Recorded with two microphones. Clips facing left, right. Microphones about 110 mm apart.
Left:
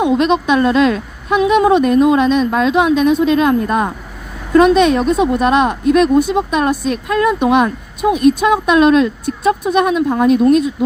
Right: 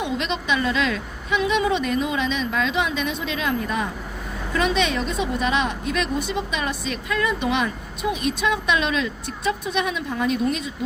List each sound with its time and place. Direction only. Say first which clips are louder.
0.0 s speech: left 12 dB; 55° left (ahead or behind)